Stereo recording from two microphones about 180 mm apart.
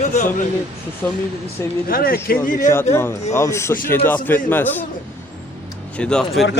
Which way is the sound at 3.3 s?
15° left (ahead or behind).